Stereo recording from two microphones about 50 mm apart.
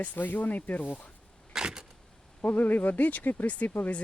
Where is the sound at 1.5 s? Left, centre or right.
Centre.